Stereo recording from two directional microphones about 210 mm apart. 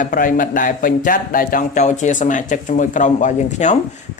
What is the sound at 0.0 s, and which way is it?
A man's voice, 40° left (ahead or behind).